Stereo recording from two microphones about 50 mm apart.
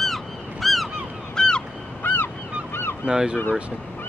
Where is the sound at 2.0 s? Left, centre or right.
Left.